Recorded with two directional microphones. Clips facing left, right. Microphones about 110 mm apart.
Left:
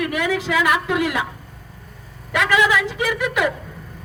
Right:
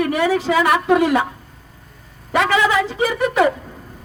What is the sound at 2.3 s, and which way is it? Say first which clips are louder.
A woman's voice: right 2 dB; 35° right (ahead or behind).